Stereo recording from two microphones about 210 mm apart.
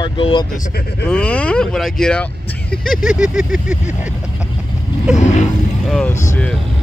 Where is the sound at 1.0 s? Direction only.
5° left (ahead or behind).